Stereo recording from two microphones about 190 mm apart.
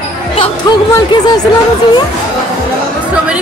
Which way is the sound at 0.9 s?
20° left (ahead or behind).